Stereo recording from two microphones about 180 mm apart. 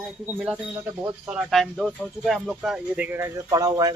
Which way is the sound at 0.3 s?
5° right (ahead or behind).